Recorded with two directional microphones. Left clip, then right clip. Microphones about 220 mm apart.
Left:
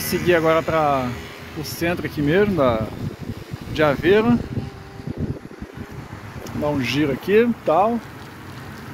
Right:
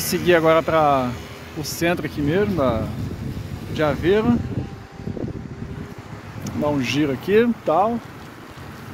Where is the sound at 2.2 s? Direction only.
5° left (ahead or behind).